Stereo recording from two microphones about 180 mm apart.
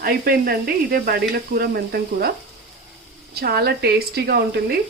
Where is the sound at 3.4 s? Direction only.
60° right (ahead or behind).